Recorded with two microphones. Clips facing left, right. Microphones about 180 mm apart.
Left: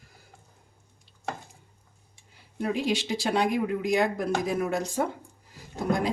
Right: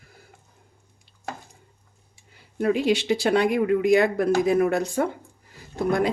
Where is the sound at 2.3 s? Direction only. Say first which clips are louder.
Right 6 dB; 65° right (ahead or behind).